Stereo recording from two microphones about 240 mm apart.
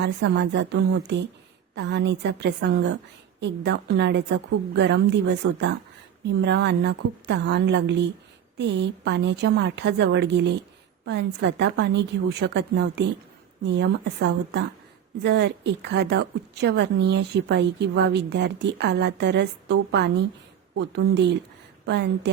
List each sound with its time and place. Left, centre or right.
0.0 s a woman's voice: right